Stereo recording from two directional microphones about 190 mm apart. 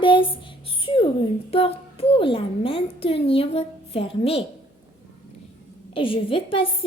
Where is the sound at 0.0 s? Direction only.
25° left (ahead or behind).